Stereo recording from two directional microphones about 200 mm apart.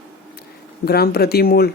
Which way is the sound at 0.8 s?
50° left (ahead or behind).